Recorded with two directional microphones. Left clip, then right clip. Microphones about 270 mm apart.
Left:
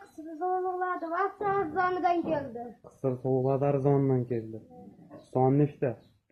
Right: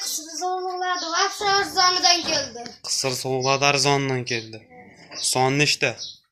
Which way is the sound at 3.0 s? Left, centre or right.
Right.